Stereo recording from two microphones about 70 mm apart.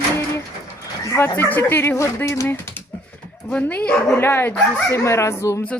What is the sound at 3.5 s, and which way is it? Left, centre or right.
Speech, left.